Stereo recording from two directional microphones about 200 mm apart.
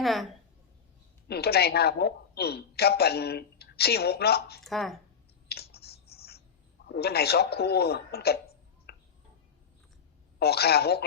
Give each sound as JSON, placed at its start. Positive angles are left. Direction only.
{"t": 0.0, "sound": "a woman's voice", "side_deg": 0}
{"t": 1.3, "sound": "a man's voice", "side_deg": 55}
{"t": 4.6, "sound": "speech", "side_deg": 0}
{"t": 5.5, "sound": "typing", "side_deg": 50}
{"t": 6.8, "sound": "a man's voice", "side_deg": 55}
{"t": 8.9, "sound": "a sound", "side_deg": 55}
{"t": 10.4, "sound": "a man's voice", "side_deg": 55}